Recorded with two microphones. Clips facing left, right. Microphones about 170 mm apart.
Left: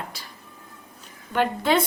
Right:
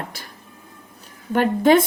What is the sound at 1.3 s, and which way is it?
Speech, 45° right (ahead or behind).